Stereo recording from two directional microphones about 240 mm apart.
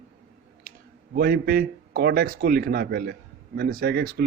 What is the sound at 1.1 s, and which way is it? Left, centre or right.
Speech, right.